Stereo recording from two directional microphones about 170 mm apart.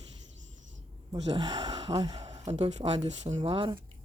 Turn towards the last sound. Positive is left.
turn(degrees=-30)  # may be behind; listen again after turning